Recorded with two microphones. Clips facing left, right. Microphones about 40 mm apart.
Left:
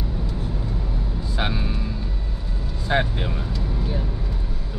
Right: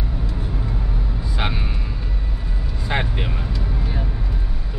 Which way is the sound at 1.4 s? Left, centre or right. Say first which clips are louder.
Even; right.